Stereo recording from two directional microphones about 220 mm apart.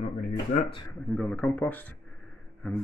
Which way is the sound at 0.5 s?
50° left (ahead or behind).